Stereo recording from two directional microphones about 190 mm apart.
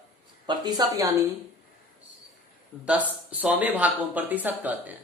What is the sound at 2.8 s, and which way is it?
Speech, 5° right (ahead or behind).